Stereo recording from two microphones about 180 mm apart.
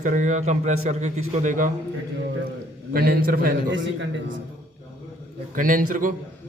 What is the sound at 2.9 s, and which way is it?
Speech, 55° right (ahead or behind).